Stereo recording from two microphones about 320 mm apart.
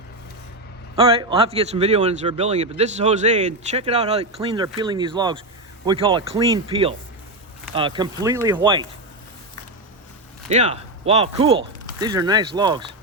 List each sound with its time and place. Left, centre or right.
0.9 s a man's voice: centre
10.5 s speech: centre